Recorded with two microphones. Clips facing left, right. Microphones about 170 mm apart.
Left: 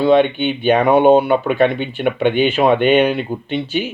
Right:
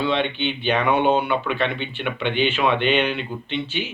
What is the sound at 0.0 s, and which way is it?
Speech, 45° left (ahead or behind).